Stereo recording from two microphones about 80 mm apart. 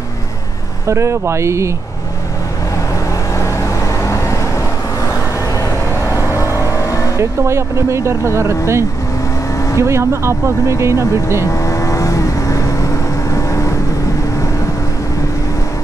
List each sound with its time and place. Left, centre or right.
0.8 s speech: right
3.3 s vehicle: left
6.0 s vehicle: left
7.2 s speech: right
11.4 s vehicle: left